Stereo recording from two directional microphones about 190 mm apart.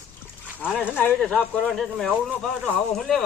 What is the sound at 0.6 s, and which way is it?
Speech, 10° left (ahead or behind).